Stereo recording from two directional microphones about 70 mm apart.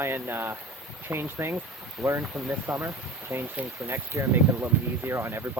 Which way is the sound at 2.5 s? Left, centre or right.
Right.